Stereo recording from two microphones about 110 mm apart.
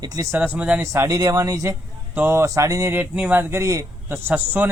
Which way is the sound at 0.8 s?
25° right (ahead or behind).